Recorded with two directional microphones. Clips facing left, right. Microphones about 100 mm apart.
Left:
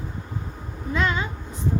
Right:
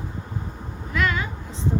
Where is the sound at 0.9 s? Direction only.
25° left (ahead or behind).